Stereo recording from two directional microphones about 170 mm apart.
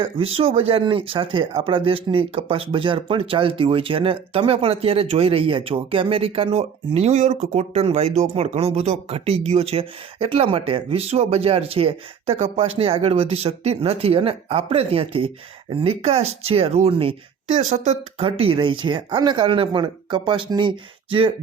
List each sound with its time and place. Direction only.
0.0 s speech: 35° right (ahead or behind)